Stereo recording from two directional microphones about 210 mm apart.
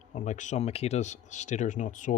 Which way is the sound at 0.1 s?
35° left (ahead or behind).